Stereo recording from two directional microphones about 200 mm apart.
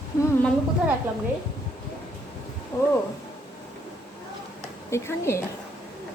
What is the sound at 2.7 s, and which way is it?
Speech, 15° left (ahead or behind).